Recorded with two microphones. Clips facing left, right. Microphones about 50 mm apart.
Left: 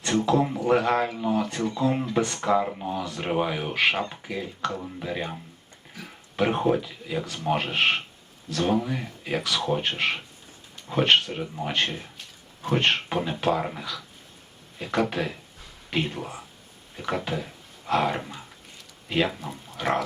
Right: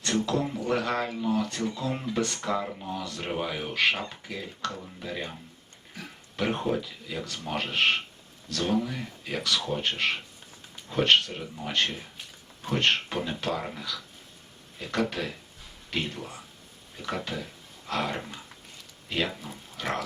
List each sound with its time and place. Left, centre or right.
0.3 s speech: centre
11.8 s speech: centre
19.7 s a sound: centre